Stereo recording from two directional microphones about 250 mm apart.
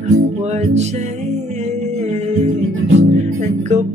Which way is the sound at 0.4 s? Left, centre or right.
Right.